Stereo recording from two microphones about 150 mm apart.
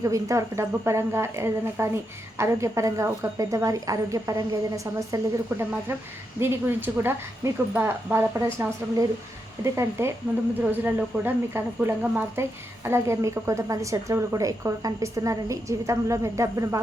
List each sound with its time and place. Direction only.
0.0 s speech: 20° right (ahead or behind)